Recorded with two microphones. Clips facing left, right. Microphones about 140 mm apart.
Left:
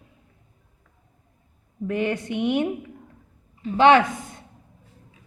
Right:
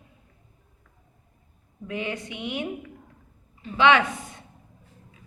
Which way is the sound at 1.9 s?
55° left (ahead or behind).